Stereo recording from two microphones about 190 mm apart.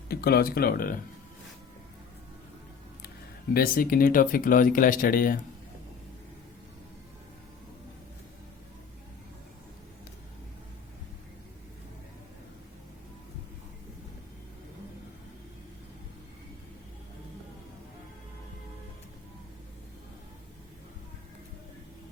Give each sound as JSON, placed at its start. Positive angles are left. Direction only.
{"t": 0.1, "sound": "speech", "side_deg": 55}
{"t": 3.5, "sound": "speech", "side_deg": 50}